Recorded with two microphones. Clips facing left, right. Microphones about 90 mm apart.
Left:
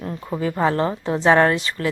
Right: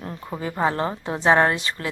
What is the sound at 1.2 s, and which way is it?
Speech, 30° right (ahead or behind).